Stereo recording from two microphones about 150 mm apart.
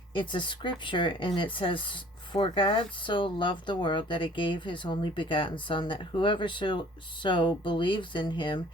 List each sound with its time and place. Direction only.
0.1 s speech: 30° left (ahead or behind)